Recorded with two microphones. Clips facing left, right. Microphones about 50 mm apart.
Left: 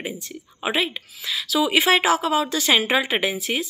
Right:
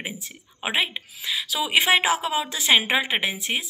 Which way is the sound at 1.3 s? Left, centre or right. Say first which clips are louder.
Left 3 dB; centre.